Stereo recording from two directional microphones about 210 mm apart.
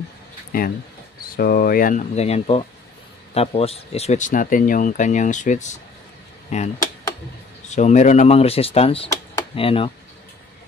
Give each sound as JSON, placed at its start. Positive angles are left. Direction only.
{"t": 0.5, "sound": "speech", "side_deg": 45}
{"t": 7.7, "sound": "speech", "side_deg": 35}